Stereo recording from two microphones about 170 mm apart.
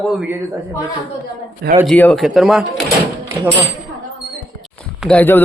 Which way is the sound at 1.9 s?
5° left (ahead or behind).